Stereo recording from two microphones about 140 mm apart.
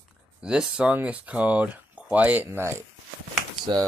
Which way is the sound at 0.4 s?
5° right (ahead or behind).